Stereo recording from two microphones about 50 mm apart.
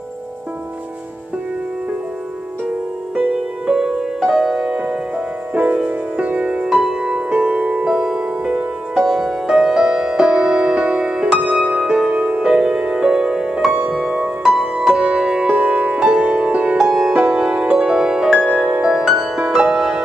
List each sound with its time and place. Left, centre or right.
3.7 s music: centre
5.5 s music: right
6.8 s music: centre
7.8 s music: centre; by 12.4 s right
12.4 s music: centre
14.5 s music: centre; by 16.7 s right
16.7 s music: centre
17.1 s music: right
17.7 s music: centre